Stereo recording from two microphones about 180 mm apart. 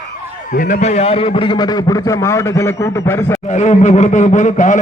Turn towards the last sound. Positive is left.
turn(degrees=45)  # may be behind; listen again after turning